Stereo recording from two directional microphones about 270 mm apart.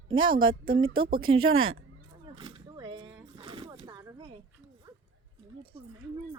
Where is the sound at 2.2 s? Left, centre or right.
Centre.